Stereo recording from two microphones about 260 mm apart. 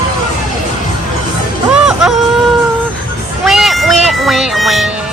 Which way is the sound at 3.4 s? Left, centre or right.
Centre.